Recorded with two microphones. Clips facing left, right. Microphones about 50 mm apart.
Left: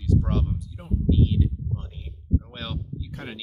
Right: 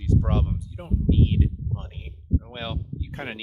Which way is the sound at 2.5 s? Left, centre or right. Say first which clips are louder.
Right 2 dB; right.